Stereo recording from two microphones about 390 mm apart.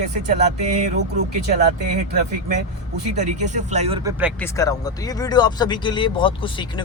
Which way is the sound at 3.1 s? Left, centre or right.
Centre.